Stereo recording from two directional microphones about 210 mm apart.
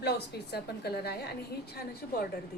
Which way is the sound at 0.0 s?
50° left (ahead or behind).